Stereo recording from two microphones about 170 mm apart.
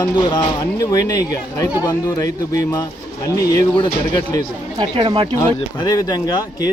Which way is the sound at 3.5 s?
25° left (ahead or behind).